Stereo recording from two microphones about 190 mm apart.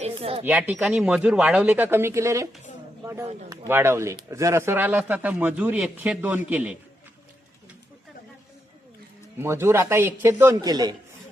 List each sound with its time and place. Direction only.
0.0 s a sound: 30° right (ahead or behind)
0.4 s speech: 10° right (ahead or behind)
9.4 s speech: 15° right (ahead or behind)